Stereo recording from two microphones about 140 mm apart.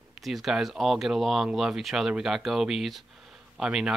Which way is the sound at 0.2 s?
Centre (ahead or behind).